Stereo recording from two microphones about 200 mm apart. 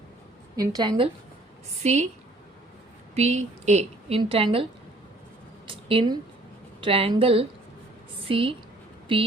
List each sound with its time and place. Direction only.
0.5 s a woman's voice: 20° right (ahead or behind); by 2.0 s 35° right (ahead or behind)
3.2 s a woman's voice: 35° right (ahead or behind)
5.6 s a sound: 25° right (ahead or behind)
6.8 s a woman's voice: 30° right (ahead or behind)